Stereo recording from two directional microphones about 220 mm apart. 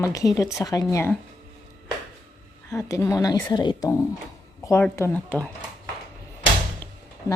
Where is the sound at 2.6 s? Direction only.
15° left (ahead or behind).